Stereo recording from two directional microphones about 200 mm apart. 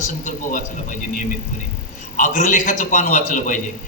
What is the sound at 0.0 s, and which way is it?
A man's voice, 40° left (ahead or behind).